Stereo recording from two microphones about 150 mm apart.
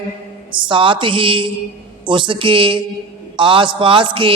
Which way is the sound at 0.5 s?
35° right (ahead or behind).